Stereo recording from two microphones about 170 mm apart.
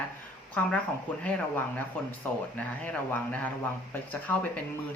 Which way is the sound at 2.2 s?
10° left (ahead or behind).